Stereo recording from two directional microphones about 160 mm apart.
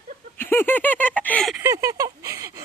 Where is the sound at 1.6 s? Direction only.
20° right (ahead or behind).